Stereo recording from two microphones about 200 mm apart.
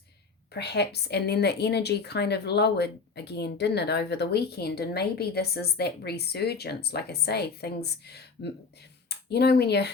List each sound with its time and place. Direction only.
0.5 s a woman's voice: 55° left (ahead or behind)